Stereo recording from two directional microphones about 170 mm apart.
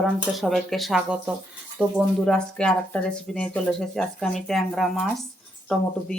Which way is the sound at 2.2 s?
5° left (ahead or behind).